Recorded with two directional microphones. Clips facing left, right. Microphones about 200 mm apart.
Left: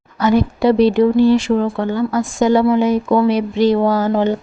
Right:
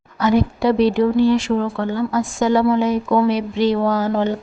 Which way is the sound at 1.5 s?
10° left (ahead or behind).